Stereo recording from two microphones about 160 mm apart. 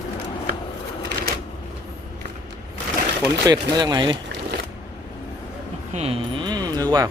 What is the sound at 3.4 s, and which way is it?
Speech, 25° right (ahead or behind).